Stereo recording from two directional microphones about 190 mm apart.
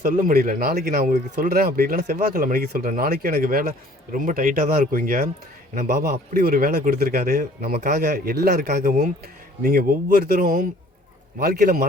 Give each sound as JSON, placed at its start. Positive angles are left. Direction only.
{"t": 0.0, "sound": "speech", "side_deg": -50}